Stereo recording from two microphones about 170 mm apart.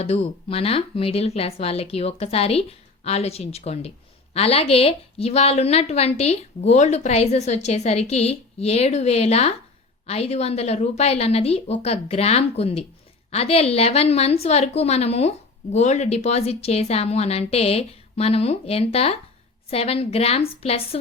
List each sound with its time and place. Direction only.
0.0 s a woman's voice: 35° left (ahead or behind)